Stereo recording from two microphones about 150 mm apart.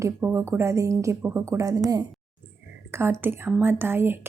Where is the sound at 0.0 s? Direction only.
15° right (ahead or behind).